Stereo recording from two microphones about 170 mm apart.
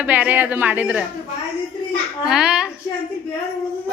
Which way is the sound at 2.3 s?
5° right (ahead or behind).